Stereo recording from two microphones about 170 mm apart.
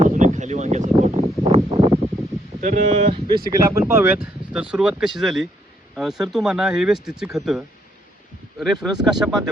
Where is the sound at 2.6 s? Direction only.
45° right (ahead or behind).